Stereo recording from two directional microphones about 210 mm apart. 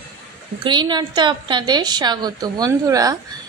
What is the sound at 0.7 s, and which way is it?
A woman's voice, 20° right (ahead or behind).